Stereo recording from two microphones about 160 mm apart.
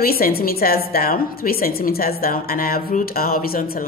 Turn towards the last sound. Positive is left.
turn(degrees=65)  # may be behind; listen again after turning